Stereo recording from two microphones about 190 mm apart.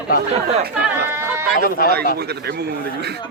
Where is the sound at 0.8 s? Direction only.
10° right (ahead or behind).